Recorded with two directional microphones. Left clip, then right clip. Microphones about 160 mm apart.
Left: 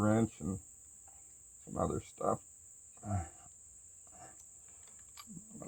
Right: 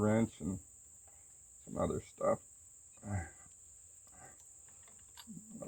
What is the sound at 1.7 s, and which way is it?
Cricket, 50° left (ahead or behind).